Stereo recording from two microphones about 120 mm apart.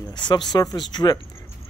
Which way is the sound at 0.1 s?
40° left (ahead or behind).